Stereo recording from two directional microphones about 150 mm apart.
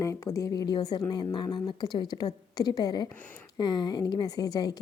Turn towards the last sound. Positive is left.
turn(degrees=25)  # may be behind; listen again after turning